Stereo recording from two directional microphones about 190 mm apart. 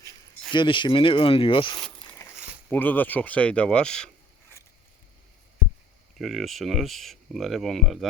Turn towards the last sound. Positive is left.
turn(degrees=0)  # may be behind; listen again after turning